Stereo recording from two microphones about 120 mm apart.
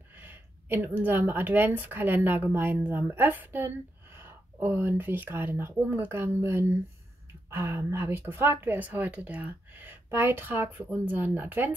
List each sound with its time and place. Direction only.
0.2 s a woman's voice: 15° right (ahead or behind)